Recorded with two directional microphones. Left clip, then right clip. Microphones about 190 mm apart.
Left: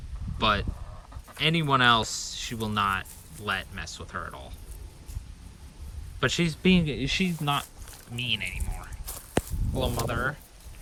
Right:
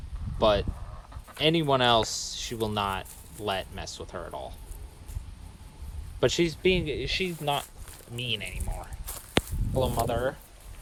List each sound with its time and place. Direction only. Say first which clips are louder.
0.3 s speech: right 2 dB; 10° right (ahead or behind)
6.1 s speech: right 2 dB; 5° right (ahead or behind)
8.1 s speech: left 3 dB; 15° right (ahead or behind)
10.1 s speech: right 1 dB; 15° right (ahead or behind)